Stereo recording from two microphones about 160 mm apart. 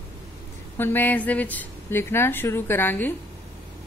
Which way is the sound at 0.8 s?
10° left (ahead or behind).